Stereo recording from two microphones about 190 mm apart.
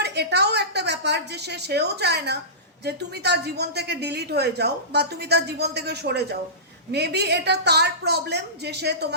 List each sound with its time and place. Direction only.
0.0 s a woman's voice: 60° right (ahead or behind)